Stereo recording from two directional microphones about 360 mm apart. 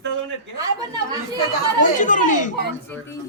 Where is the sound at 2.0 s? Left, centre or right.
Left.